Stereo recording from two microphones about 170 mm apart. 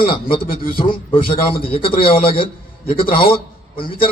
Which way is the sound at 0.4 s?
60° left (ahead or behind).